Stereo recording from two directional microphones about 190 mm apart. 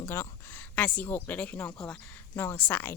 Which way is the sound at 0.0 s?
15° left (ahead or behind).